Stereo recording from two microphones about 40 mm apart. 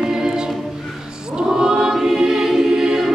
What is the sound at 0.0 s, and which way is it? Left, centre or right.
Choir, centre.